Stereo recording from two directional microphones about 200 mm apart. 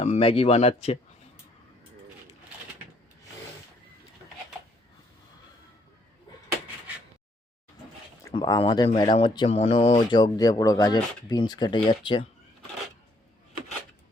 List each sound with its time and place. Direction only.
0.0 s speech: 30° left (ahead or behind)
8.3 s speech: 25° left (ahead or behind)